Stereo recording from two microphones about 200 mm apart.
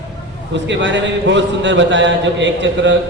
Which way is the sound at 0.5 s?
65° right (ahead or behind).